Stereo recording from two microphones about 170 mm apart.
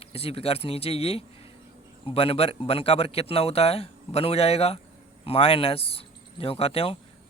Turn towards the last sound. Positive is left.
turn(degrees=35)  # may be behind; listen again after turning